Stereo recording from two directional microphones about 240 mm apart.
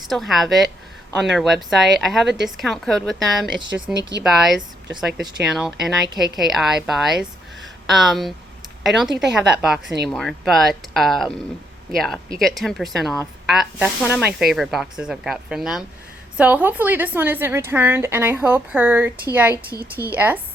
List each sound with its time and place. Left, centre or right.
0.0 s a woman's voice: centre
9.8 s speech: right
10.1 s a woman's voice: centre